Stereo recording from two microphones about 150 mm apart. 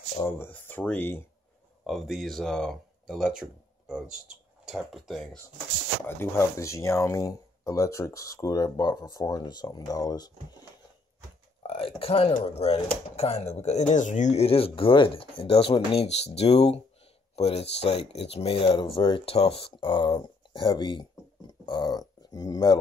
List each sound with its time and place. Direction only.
0.3 s speech: 10° left (ahead or behind)
1.9 s speech: centre (ahead or behind)
6.0 s speech: 15° left (ahead or behind)
11.6 s speech: 40° left (ahead or behind)